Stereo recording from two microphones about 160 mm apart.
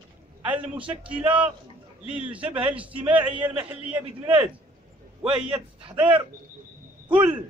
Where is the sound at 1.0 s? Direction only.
10° right (ahead or behind).